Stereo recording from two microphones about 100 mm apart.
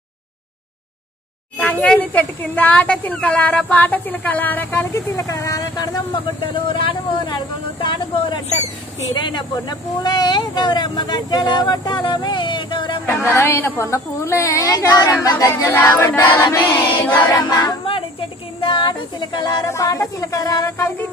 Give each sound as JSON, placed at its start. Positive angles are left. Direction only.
{"t": 1.6, "sound": "speech", "side_deg": 10}
{"t": 4.9, "sound": "music", "side_deg": 35}
{"t": 6.4, "sound": "speech", "side_deg": 55}
{"t": 13.0, "sound": "a woman's voice", "side_deg": 25}
{"t": 15.2, "sound": "music", "side_deg": 35}
{"t": 16.5, "sound": "a woman's voice", "side_deg": 20}
{"t": 17.3, "sound": "music", "side_deg": 40}
{"t": 18.6, "sound": "a sound", "side_deg": 55}
{"t": 19.6, "sound": "music", "side_deg": 30}